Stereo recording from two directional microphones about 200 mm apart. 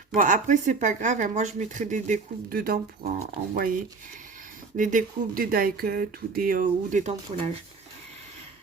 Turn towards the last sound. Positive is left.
turn(degrees=-35)  # may be behind; listen again after turning